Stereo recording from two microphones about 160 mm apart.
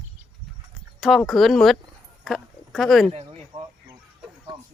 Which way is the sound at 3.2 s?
25° right (ahead or behind).